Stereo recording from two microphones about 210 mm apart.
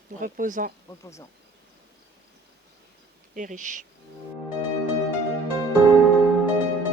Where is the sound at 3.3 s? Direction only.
35° right (ahead or behind).